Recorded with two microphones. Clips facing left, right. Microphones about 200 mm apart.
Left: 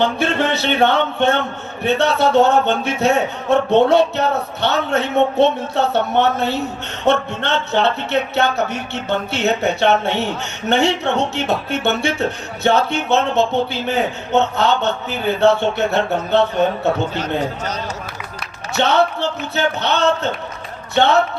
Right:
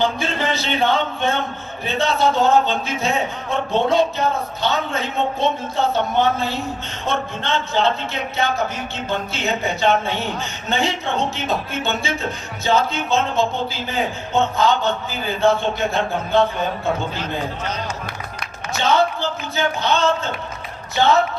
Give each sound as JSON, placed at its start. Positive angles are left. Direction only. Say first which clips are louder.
{"t": 0.0, "sound": "speech", "louder": "left 4 dB", "side_deg": 65}
{"t": 18.8, "sound": "speech", "louder": "left 2 dB", "side_deg": 65}